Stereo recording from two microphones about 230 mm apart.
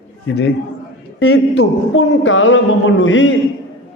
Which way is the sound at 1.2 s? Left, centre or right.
Left.